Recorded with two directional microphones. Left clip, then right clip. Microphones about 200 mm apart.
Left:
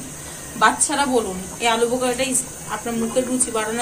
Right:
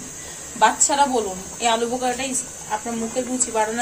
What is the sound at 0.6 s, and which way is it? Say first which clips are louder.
A woman's voice: right 1 dB; 30° right (ahead or behind).